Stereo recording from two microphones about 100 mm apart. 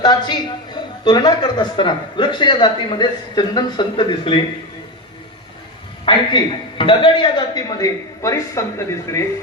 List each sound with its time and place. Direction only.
0.0 s a woman's voice: 45° left (ahead or behind)
6.1 s a woman's voice: 55° left (ahead or behind); by 8.6 s 30° left (ahead or behind)